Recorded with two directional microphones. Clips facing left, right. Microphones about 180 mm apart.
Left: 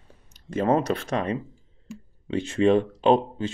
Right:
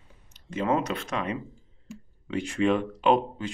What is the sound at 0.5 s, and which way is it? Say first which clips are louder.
Speech: left 4 dB; 40° left (ahead or behind).